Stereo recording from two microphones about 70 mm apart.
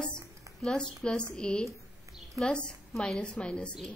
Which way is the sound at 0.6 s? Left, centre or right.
Centre.